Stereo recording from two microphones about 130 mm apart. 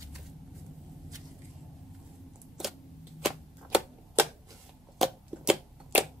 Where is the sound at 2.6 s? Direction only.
5° right (ahead or behind).